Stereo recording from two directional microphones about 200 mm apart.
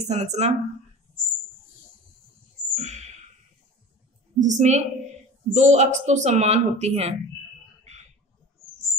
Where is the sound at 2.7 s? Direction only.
35° right (ahead or behind).